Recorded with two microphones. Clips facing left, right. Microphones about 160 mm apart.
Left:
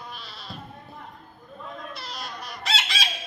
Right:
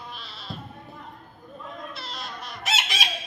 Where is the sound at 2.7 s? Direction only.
20° right (ahead or behind).